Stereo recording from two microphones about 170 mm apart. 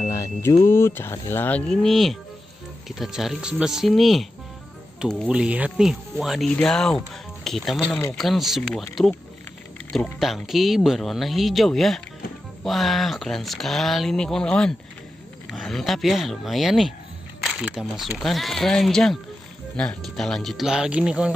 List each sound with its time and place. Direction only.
0.1 s music: 20° left (ahead or behind)
0.7 s speech: 15° left (ahead or behind)
10.1 s speech: centre (ahead or behind)